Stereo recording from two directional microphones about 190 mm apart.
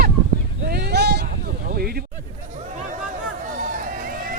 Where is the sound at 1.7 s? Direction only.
55° right (ahead or behind).